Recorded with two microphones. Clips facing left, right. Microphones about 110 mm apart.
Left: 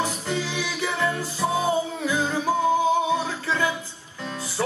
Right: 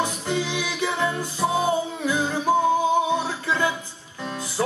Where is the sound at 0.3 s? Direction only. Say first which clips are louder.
Right 2 dB; 20° right (ahead or behind).